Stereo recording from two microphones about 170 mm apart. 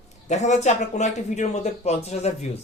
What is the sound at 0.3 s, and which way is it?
Speech, 45° left (ahead or behind).